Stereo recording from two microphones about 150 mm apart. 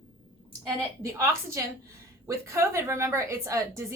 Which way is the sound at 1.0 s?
20° right (ahead or behind).